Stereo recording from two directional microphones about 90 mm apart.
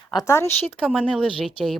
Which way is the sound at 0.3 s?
30° left (ahead or behind).